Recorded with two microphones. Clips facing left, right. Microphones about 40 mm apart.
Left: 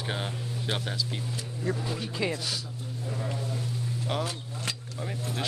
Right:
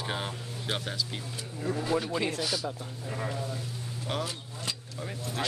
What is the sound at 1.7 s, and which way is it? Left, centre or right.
Speech, left.